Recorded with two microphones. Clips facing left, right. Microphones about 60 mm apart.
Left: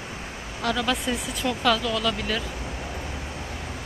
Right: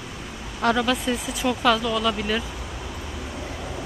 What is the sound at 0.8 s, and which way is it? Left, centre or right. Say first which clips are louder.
Speech: right 2 dB; centre.